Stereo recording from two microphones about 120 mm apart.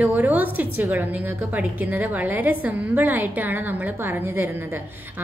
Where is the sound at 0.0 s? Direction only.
15° right (ahead or behind).